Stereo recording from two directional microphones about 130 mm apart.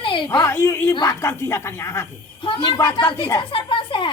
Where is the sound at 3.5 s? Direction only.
40° left (ahead or behind).